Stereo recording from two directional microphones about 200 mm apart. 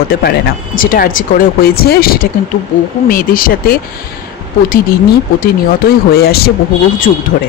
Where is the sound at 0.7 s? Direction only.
45° left (ahead or behind).